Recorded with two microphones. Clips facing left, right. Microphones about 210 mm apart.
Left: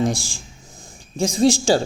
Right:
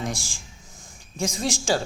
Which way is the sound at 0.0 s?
30° left (ahead or behind).